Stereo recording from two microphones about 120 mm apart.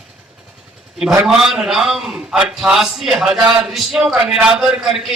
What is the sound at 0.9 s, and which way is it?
A man's voice, 5° right (ahead or behind).